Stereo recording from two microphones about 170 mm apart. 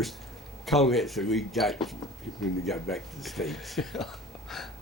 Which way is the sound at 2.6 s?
Centre (ahead or behind).